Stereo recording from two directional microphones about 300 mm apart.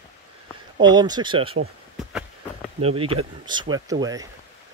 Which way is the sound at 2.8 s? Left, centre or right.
Centre.